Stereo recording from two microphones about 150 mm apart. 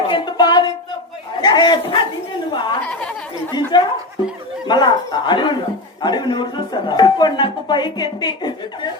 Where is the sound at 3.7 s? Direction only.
30° left (ahead or behind).